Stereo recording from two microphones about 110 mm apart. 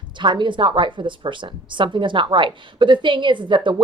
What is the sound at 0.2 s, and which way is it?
A woman's voice, 45° right (ahead or behind).